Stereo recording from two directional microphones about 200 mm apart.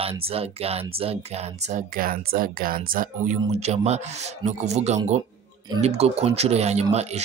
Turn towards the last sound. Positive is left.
turn(degrees=-35)  # may be behind; listen again after turning